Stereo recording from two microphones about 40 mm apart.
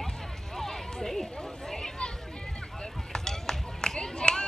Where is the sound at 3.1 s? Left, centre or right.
Centre.